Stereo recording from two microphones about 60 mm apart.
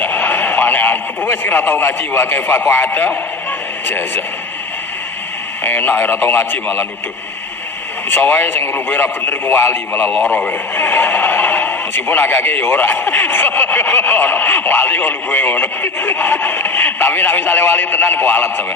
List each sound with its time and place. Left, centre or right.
0.0 s radio: left
2.7 s speech: left
5.6 s speech: left
8.1 s speech: left